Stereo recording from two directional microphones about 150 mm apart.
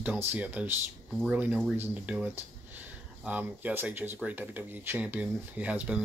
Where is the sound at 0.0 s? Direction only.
10° right (ahead or behind).